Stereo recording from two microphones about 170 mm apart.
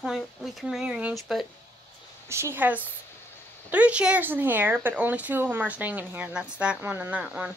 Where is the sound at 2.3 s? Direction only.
15° right (ahead or behind).